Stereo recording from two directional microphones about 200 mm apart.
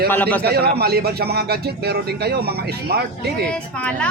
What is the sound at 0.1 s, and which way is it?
Speech, 10° left (ahead or behind).